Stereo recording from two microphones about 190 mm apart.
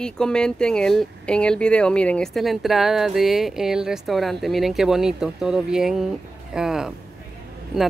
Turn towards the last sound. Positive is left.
turn(degrees=0)  # may be behind; listen again after turning